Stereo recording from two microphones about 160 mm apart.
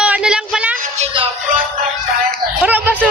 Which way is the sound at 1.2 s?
35° right (ahead or behind).